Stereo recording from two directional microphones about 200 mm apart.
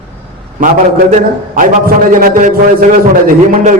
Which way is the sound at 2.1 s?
40° right (ahead or behind).